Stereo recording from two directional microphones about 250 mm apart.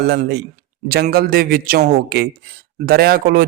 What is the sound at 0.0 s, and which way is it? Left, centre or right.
A man's voice, right.